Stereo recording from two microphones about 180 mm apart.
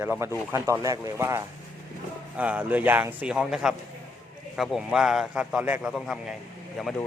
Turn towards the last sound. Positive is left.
turn(degrees=0)  # may be behind; listen again after turning